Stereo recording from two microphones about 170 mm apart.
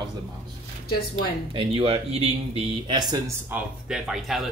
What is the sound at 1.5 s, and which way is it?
Speech, 30° right (ahead or behind).